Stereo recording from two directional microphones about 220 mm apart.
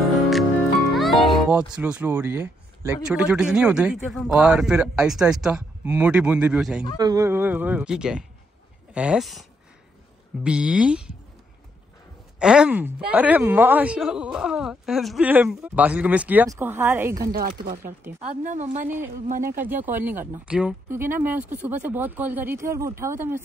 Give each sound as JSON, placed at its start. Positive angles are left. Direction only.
{"t": 0.9, "sound": "speech", "side_deg": 0}
{"t": 7.0, "sound": "speech", "side_deg": -15}
{"t": 12.4, "sound": "speech", "side_deg": -5}
{"t": 17.3, "sound": "speech", "side_deg": -40}
{"t": 19.6, "sound": "speech", "side_deg": -10}